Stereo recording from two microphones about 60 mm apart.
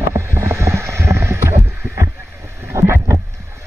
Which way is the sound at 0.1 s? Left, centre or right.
Right.